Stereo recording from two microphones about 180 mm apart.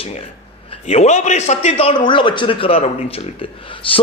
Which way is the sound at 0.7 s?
35° left (ahead or behind).